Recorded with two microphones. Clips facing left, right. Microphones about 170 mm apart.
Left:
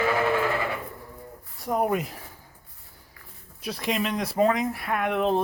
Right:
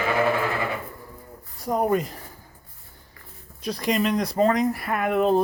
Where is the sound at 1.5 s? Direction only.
Centre (ahead or behind).